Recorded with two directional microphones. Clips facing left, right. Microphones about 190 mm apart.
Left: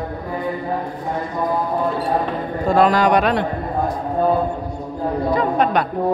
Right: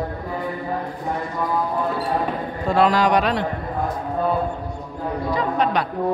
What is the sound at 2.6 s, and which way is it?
Speech, 45° left (ahead or behind).